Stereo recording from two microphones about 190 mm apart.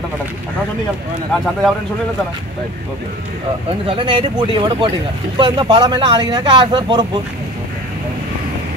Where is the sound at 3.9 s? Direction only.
30° right (ahead or behind).